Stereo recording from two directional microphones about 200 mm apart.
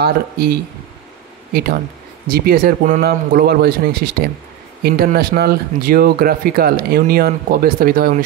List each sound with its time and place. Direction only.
0.0 s speech: 50° right (ahead or behind)